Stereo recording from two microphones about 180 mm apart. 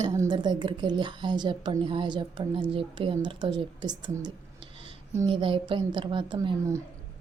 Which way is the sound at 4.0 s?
25° right (ahead or behind).